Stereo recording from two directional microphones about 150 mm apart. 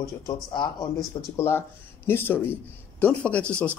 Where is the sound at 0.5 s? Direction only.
30° left (ahead or behind).